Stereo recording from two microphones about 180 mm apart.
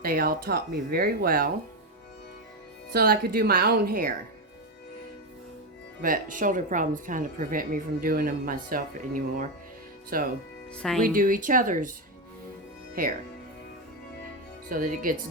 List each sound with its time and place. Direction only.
0.0 s speech: 55° right (ahead or behind)
2.9 s speech: 55° right (ahead or behind)
6.0 s a woman's voice: 50° right (ahead or behind)
10.8 s speech: 5° left (ahead or behind)
11.0 s a woman's voice: 50° right (ahead or behind)
14.7 s a woman's voice: 50° right (ahead or behind)